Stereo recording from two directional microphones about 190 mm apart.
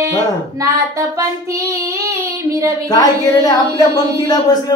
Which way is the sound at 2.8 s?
20° left (ahead or behind).